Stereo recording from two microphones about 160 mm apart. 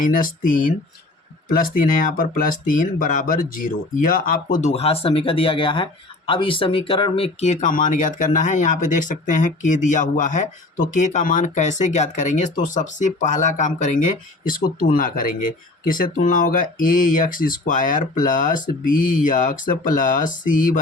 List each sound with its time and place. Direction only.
0.0 s speech: 60° left (ahead or behind)
4.7 s speech: 40° left (ahead or behind); by 20.8 s 55° left (ahead or behind)